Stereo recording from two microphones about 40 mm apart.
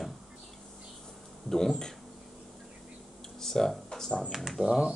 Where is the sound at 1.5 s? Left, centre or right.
Centre.